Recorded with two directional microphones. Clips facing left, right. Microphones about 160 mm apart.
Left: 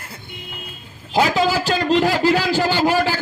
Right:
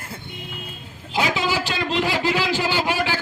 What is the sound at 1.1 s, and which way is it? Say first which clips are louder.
A man's voice: left 5 dB; 40° left (ahead or behind).